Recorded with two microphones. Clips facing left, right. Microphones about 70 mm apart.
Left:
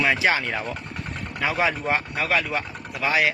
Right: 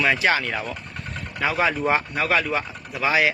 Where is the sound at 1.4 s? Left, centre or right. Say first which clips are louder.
Right 2 dB; centre.